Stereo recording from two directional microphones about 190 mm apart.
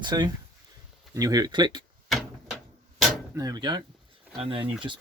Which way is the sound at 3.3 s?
20° right (ahead or behind).